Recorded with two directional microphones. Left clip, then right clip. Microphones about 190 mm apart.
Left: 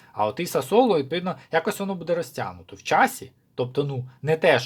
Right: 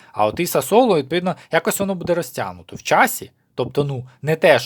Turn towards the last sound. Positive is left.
turn(degrees=-30)  # may be behind; listen again after turning